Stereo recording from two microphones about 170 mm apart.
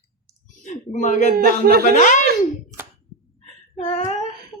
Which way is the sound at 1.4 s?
65° right (ahead or behind).